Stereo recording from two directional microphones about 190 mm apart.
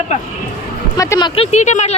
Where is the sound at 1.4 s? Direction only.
35° left (ahead or behind).